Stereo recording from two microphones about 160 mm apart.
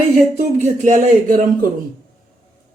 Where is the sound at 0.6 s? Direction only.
50° right (ahead or behind).